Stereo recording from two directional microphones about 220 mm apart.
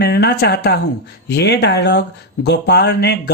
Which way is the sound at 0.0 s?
45° left (ahead or behind).